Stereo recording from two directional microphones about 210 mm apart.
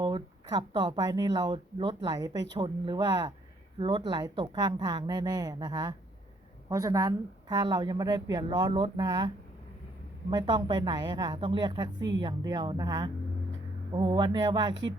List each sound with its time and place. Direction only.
0.0 s speech: 20° right (ahead or behind)